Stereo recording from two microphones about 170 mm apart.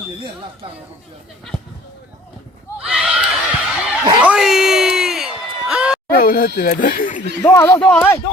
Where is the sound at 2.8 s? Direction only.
5° right (ahead or behind).